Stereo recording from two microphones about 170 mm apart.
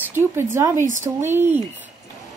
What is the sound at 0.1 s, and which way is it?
Speech, 15° right (ahead or behind).